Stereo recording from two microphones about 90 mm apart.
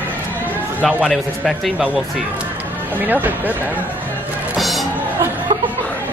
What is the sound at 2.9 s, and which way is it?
Speech, 20° right (ahead or behind).